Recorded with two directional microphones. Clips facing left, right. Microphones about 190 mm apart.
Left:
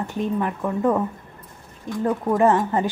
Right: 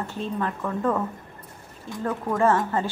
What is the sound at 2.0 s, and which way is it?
Speech, 15° left (ahead or behind).